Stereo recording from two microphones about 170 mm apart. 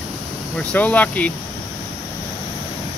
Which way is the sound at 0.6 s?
10° left (ahead or behind).